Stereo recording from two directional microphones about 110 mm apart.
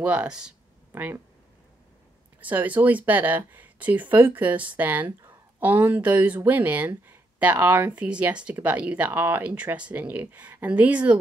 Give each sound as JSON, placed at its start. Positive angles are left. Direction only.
{"t": 0.0, "sound": "speech", "side_deg": -10}
{"t": 2.4, "sound": "speech", "side_deg": -15}